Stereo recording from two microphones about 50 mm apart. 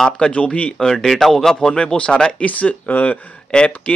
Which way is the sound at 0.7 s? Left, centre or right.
Centre.